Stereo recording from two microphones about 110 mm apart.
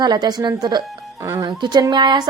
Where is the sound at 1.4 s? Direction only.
40° right (ahead or behind).